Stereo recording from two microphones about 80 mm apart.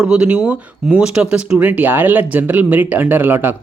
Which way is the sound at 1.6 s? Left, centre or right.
Right.